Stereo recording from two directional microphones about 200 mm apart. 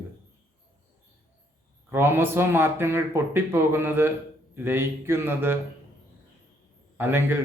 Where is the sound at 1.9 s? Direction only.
10° right (ahead or behind).